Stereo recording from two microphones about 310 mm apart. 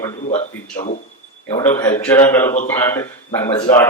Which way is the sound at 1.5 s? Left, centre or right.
Centre.